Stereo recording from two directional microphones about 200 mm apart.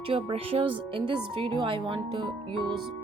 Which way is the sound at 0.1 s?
25° right (ahead or behind).